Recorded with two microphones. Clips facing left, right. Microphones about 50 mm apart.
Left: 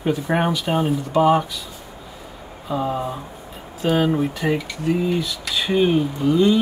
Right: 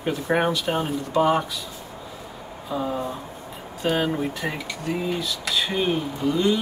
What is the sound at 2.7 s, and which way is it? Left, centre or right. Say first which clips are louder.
Speech: left 3 dB; centre.